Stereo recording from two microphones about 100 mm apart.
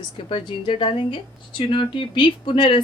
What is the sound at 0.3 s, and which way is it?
A woman's voice, 60° left (ahead or behind).